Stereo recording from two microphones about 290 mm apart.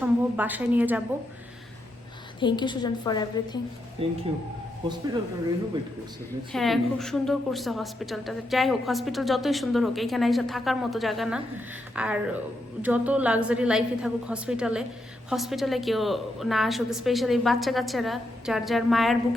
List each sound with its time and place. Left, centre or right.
0.0 s a woman's voice: centre
2.4 s a woman's voice: centre
4.0 s speech: centre
6.5 s a woman's voice: centre